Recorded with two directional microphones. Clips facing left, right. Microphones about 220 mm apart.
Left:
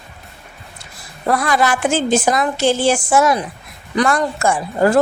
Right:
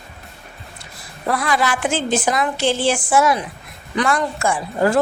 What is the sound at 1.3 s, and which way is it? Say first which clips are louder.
A woman's voice: left 3 dB; 45° left (ahead or behind).